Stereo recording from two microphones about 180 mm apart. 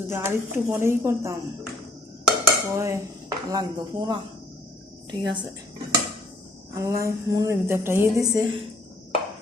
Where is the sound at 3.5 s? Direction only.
20° right (ahead or behind).